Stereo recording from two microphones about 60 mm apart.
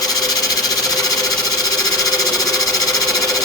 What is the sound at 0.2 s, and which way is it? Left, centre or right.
Sewing machine, left.